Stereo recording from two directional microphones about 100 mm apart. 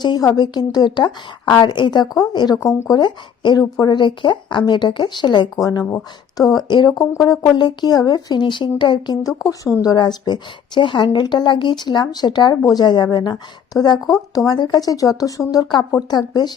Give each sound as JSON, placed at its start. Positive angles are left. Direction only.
{"t": 0.0, "sound": "a woman's voice", "side_deg": 45}
{"t": 2.6, "sound": "speech", "side_deg": 35}
{"t": 3.0, "sound": "a woman's voice", "side_deg": 50}
{"t": 3.9, "sound": "a woman's voice", "side_deg": 55}
{"t": 7.5, "sound": "a woman's voice", "side_deg": 45}